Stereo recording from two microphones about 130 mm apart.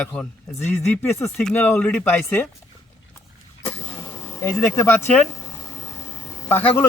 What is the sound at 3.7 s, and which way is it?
Vehicle, 15° left (ahead or behind).